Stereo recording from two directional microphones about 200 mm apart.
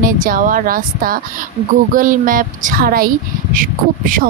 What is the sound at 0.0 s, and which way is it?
Speech, 45° right (ahead or behind).